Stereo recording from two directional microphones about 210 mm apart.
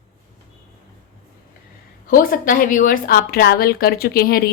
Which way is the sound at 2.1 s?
40° left (ahead or behind).